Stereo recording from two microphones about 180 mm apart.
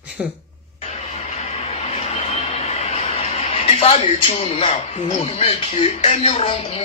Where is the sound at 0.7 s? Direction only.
40° left (ahead or behind).